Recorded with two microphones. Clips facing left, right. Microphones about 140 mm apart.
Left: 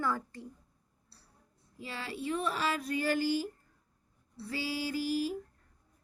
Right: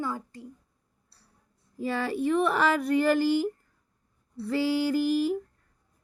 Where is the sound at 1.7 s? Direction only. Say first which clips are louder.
Right 12 dB; 55° right (ahead or behind).